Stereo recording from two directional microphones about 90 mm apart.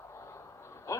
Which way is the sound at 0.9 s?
35° left (ahead or behind).